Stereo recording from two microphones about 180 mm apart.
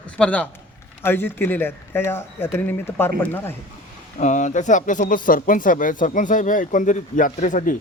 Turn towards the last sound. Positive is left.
turn(degrees=45)  # may be behind; listen again after turning